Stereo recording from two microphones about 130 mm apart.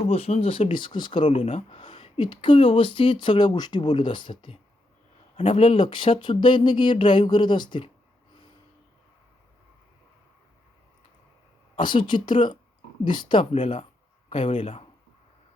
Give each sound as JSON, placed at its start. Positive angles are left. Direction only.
{"t": 0.1, "sound": "speech", "side_deg": 50}
{"t": 1.3, "sound": "speech", "side_deg": 50}
{"t": 11.8, "sound": "speech", "side_deg": 40}